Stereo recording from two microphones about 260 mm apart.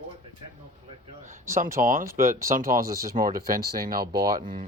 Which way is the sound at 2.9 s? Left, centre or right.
Centre.